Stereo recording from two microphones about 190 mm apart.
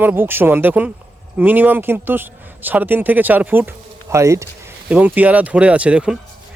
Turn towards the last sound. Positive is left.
turn(degrees=-5)  # may be behind; listen again after turning